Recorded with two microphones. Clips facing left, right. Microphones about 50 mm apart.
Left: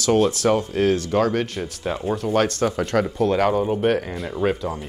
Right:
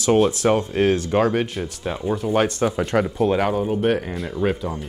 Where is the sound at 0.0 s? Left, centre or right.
Centre.